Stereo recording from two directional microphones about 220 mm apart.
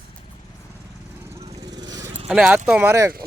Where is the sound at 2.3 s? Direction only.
5° right (ahead or behind).